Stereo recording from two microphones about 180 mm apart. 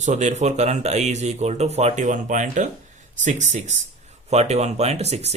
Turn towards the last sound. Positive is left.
turn(degrees=-35)  # may be behind; listen again after turning